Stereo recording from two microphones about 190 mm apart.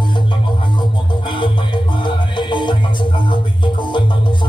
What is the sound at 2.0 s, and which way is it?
Music, 25° left (ahead or behind).